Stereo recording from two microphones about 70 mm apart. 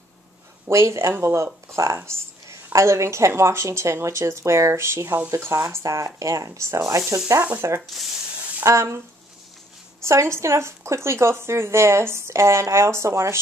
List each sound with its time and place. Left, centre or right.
0.7 s speech: right
7.8 s speech: centre
8.6 s speech: right
10.0 s speech: right